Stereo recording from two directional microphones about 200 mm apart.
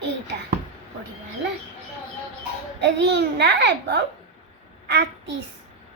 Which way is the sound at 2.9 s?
60° right (ahead or behind).